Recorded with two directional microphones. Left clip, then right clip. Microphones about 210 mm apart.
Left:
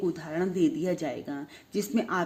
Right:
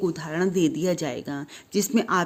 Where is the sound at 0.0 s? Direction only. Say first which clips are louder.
Right 4 dB; 40° right (ahead or behind).